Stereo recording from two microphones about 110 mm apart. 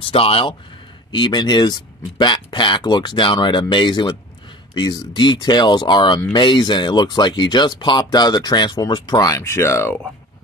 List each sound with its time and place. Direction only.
0.0 s speech: 55° left (ahead or behind)
1.1 s speech: 40° left (ahead or behind)
9.4 s speech: 25° left (ahead or behind)